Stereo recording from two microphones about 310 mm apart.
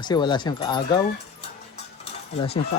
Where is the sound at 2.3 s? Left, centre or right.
Centre.